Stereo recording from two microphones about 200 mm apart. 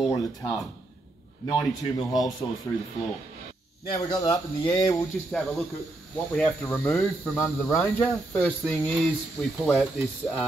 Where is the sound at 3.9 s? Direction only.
15° left (ahead or behind).